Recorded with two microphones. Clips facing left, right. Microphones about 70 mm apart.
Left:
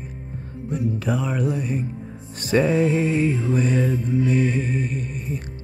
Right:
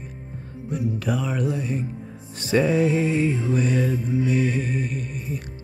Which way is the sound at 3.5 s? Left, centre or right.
Left.